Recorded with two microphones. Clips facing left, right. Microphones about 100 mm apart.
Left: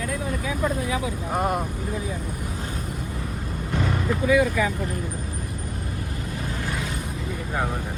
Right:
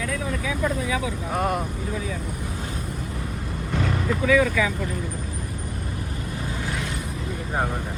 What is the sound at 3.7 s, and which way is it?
Vehicle, 15° left (ahead or behind).